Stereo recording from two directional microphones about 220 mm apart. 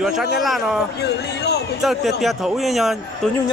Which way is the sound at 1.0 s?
50° left (ahead or behind).